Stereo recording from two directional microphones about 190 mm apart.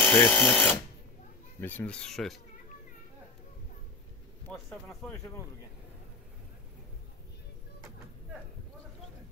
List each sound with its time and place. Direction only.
0.0 s speech: 5° left (ahead or behind)
4.5 s speech: 5° left (ahead or behind)